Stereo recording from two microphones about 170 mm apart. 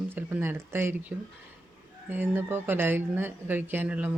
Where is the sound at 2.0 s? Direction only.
10° right (ahead or behind).